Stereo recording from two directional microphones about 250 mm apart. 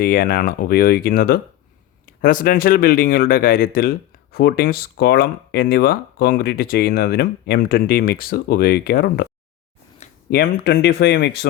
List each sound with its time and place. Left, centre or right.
0.0 s speech: left
10.2 s speech: left